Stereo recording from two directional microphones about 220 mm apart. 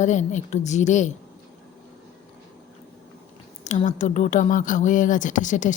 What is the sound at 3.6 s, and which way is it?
Speech, 30° left (ahead or behind).